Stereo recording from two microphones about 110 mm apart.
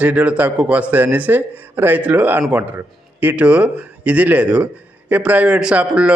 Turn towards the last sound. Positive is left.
turn(degrees=-10)  # may be behind; listen again after turning